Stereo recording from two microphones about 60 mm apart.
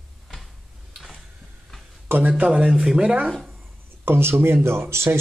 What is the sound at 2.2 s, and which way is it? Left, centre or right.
Speech, right.